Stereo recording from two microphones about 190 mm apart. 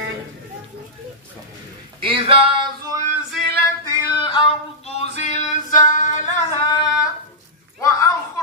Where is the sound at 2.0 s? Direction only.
30° right (ahead or behind).